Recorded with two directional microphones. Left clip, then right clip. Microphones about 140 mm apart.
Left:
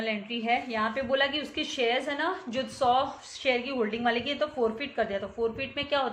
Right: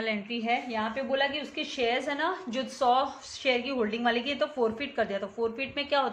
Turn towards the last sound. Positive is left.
turn(degrees=-15)  # may be behind; listen again after turning